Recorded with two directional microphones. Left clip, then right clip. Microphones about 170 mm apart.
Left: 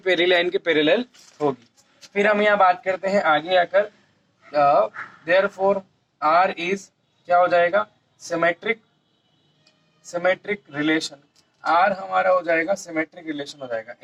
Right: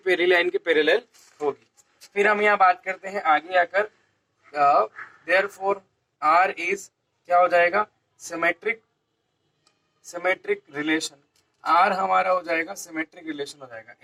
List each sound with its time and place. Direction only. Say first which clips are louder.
0.0 s speech: left 1 dB; 15° left (ahead or behind)
10.1 s speech: left 3 dB; 15° left (ahead or behind)